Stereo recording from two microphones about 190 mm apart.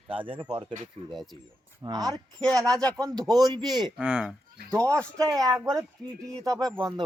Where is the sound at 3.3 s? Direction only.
20° right (ahead or behind).